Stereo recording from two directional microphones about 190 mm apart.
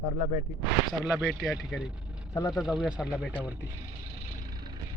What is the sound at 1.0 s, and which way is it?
Speech, centre (ahead or behind).